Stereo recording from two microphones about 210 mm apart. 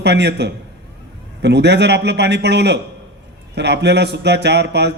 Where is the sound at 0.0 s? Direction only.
55° right (ahead or behind).